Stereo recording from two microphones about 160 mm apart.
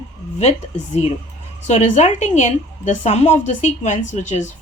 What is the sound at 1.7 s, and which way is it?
A woman's voice, 45° left (ahead or behind).